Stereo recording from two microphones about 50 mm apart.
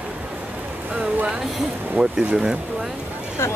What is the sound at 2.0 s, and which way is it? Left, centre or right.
Speech, right.